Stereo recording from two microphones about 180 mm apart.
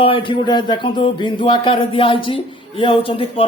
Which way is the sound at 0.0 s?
30° left (ahead or behind).